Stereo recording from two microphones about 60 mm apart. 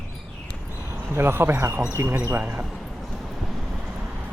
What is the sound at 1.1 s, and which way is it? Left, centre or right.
Speech, right.